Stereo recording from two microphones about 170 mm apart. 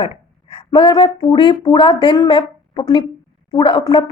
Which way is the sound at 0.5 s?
30° left (ahead or behind).